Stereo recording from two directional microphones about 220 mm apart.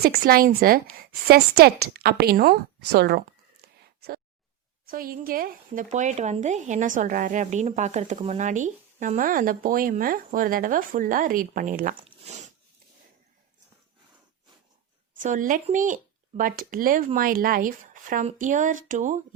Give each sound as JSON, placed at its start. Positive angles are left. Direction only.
{"t": 0.0, "sound": "a woman's voice", "side_deg": -45}
{"t": 15.2, "sound": "a woman's voice", "side_deg": -35}